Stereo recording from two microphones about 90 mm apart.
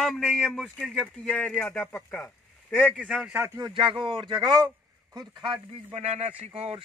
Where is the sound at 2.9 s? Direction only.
5° right (ahead or behind).